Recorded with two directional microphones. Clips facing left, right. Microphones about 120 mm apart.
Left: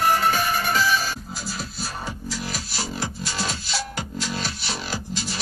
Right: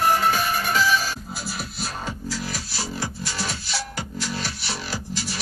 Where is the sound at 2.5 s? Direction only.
20° left (ahead or behind).